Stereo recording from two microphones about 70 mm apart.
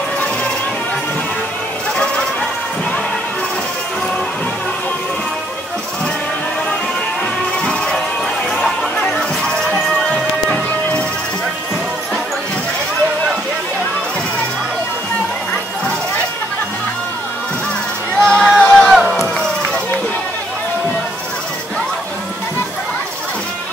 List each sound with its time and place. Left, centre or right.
7.6 s music: centre
9.1 s music: centre
18.2 s a sound: centre
18.6 s crowd: centre